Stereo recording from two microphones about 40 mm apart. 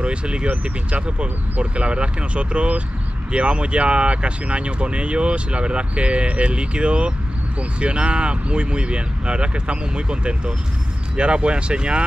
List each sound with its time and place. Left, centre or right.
0.0 s speech: right